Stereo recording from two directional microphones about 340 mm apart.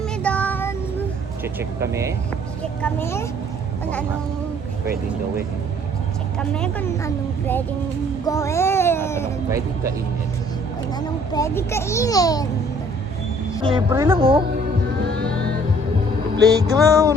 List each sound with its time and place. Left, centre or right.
0.2 s child singing: centre
1.5 s speech: centre
2.8 s a child's voice: centre
6.5 s speech: centre
8.2 s a sound: centre
9.5 s speech: centre
10.9 s a child's voice: centre
13.6 s speech: centre
15.0 s music: right
16.5 s speech: centre